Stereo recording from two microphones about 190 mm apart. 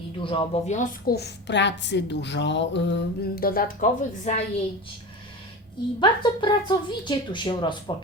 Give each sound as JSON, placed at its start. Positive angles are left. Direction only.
{"t": 0.2, "sound": "speech", "side_deg": 25}
{"t": 1.1, "sound": "a woman's voice", "side_deg": 65}
{"t": 6.0, "sound": "a woman's voice", "side_deg": 25}